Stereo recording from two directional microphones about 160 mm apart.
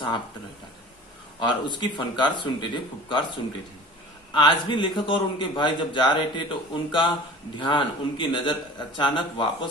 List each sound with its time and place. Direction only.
1.4 s a man's voice: 30° left (ahead or behind)
4.3 s a man's voice: 30° left (ahead or behind)